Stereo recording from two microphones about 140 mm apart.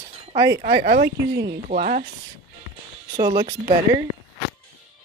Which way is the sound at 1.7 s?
70° right (ahead or behind).